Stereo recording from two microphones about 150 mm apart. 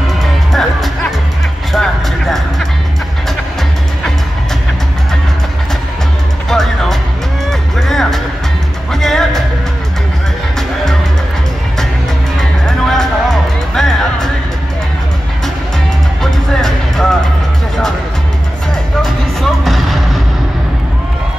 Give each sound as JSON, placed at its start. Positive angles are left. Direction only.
{"t": 0.5, "sound": "music", "side_deg": 0}
{"t": 6.5, "sound": "music", "side_deg": 0}
{"t": 12.4, "sound": "music", "side_deg": 5}
{"t": 16.2, "sound": "music", "side_deg": 5}
{"t": 19.0, "sound": "music", "side_deg": 0}